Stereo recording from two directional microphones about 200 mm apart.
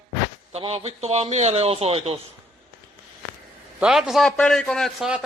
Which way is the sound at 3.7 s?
5° right (ahead or behind).